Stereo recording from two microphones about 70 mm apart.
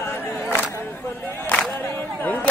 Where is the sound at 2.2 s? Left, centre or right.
Left.